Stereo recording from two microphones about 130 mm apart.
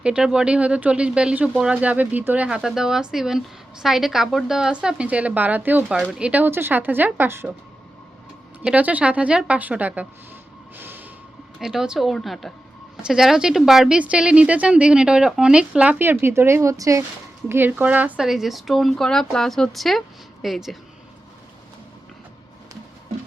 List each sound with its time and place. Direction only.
0.0 s speech: 5° right (ahead or behind)
8.6 s speech: 10° right (ahead or behind)
10.8 s train: 15° right (ahead or behind)
11.6 s speech: 5° right (ahead or behind); by 17.0 s 25° right (ahead or behind)
17.5 s speech: 15° right (ahead or behind)